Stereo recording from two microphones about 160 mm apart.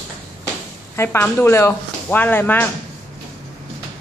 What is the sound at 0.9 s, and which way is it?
Speech, 15° left (ahead or behind).